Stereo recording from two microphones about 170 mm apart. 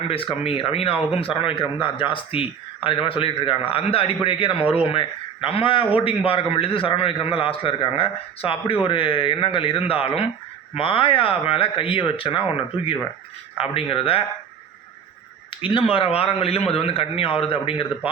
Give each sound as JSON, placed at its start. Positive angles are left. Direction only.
{"t": 0.1, "sound": "a man's voice", "side_deg": 35}
{"t": 15.4, "sound": "a man's voice", "side_deg": 30}